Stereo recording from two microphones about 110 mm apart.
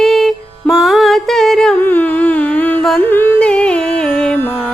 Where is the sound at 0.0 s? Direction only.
Centre (ahead or behind).